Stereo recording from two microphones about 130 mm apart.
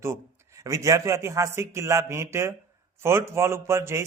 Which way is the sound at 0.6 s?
25° right (ahead or behind).